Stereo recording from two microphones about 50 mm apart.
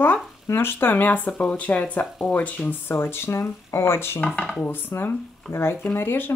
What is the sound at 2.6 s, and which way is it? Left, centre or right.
Speech, left.